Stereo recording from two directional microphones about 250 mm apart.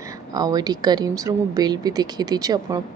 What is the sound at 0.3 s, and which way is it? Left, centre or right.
Speech, centre.